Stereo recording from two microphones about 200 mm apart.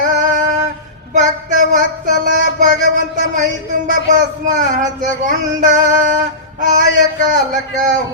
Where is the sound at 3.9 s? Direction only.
40° right (ahead or behind).